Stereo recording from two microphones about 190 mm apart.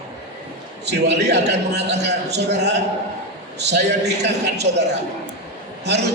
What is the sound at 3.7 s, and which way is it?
Speech, 60° right (ahead or behind).